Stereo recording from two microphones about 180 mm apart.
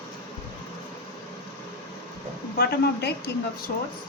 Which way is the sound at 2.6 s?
65° left (ahead or behind).